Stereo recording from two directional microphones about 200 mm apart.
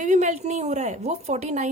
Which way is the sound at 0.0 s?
35° right (ahead or behind).